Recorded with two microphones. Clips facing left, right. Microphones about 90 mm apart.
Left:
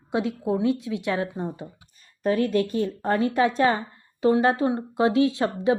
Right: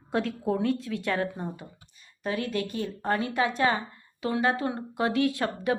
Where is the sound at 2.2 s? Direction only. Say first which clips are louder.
Left 8 dB; 40° left (ahead or behind).